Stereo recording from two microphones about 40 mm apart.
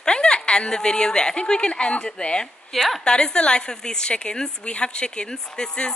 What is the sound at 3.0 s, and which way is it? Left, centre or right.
A woman's voice, left.